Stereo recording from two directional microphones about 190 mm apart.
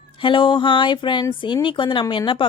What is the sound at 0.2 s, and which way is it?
Speech, 25° left (ahead or behind).